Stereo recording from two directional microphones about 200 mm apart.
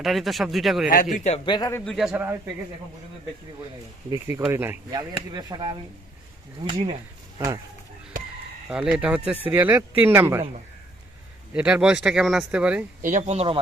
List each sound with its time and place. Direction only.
0.0 s speech: centre (ahead or behind)
1.1 s a man's voice: 35° left (ahead or behind)
1.5 s speech: 20° left (ahead or behind)
1.8 s speech: centre (ahead or behind)
4.1 s speech: 15° right (ahead or behind)
8.7 s speech: 5° right (ahead or behind)
11.5 s speech: 5° right (ahead or behind)
13.0 s speech: 40° right (ahead or behind)